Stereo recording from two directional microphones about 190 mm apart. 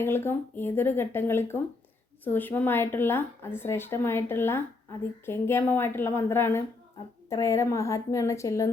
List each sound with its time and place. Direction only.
0.0 s a woman's voice: 10° left (ahead or behind)